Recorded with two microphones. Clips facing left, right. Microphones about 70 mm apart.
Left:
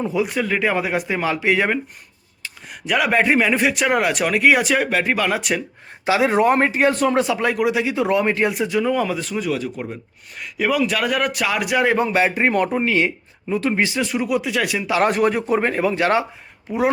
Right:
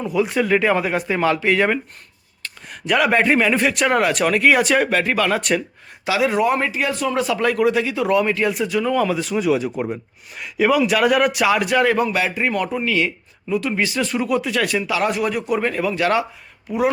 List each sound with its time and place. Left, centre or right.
0.2 s speech: centre
6.1 s speech: left
7.2 s speech: centre
8.8 s speech: centre
9.5 s speech: centre
10.3 s speech: centre
11.8 s speech: left
14.0 s speech: centre
15.0 s speech: left